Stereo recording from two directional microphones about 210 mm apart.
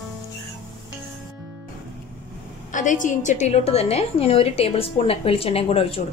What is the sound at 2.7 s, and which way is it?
A woman's voice, 35° left (ahead or behind).